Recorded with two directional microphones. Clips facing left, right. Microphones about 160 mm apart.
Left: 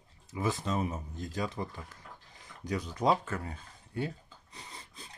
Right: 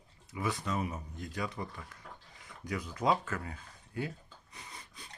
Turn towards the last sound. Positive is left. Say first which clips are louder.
# left 2 dB
turn(degrees=25)  # may be behind; listen again after turning